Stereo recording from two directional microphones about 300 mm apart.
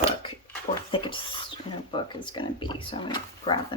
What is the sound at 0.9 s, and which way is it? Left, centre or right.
Speech, centre.